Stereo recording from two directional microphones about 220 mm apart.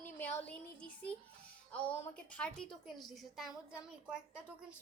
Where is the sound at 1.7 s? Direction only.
5° left (ahead or behind).